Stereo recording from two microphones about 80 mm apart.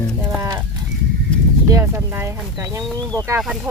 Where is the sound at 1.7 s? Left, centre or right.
Right.